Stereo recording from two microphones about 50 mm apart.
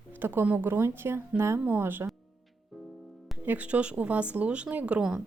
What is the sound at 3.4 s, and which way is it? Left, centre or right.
Speech, right.